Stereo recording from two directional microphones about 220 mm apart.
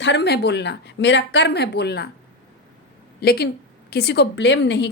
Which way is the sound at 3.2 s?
45° left (ahead or behind).